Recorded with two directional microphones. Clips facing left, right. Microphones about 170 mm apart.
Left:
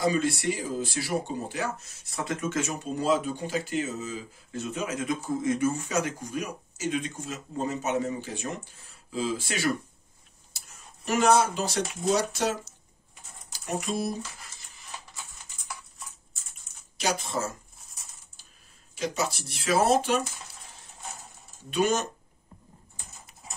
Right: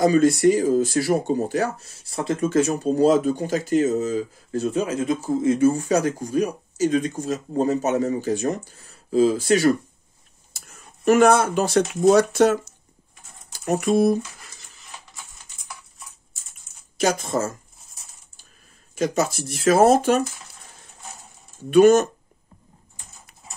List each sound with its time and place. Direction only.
0.0 s speech: 45° right (ahead or behind)
10.5 s a sound: 50° right (ahead or behind)
11.1 s speech: 55° right (ahead or behind)
13.7 s speech: 55° right (ahead or behind)
16.9 s speech: 45° right (ahead or behind)
18.9 s speech: 50° right (ahead or behind)
21.6 s speech: 50° right (ahead or behind)